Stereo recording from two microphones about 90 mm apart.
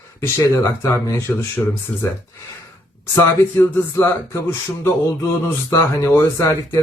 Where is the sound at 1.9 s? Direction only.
10° left (ahead or behind).